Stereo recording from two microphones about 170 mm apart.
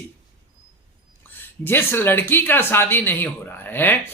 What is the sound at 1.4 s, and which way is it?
A woman's voice, 10° left (ahead or behind).